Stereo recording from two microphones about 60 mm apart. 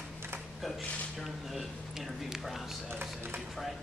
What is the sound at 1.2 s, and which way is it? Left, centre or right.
Speech, centre.